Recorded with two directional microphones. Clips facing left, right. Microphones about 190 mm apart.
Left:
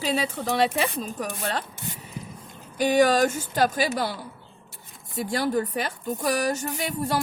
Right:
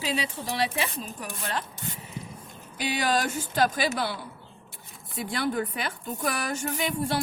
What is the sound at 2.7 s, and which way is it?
Speech, 45° left (ahead or behind).